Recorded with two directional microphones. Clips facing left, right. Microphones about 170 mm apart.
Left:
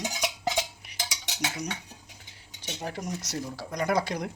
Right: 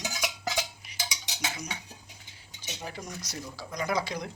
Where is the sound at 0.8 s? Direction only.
65° left (ahead or behind).